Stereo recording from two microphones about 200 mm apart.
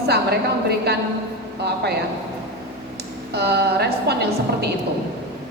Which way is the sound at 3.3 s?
55° right (ahead or behind).